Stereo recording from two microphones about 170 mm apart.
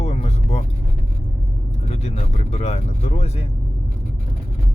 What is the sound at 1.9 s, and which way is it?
Speech, 40° left (ahead or behind).